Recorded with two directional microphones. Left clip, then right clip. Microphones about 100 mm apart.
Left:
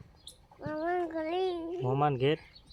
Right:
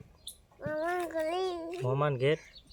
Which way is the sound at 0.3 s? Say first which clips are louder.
Right 3 dB; 20° right (ahead or behind).